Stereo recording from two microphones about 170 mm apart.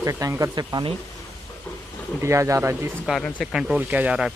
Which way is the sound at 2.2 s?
15° right (ahead or behind).